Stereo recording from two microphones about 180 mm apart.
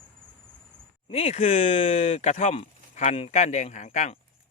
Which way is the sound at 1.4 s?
45° left (ahead or behind).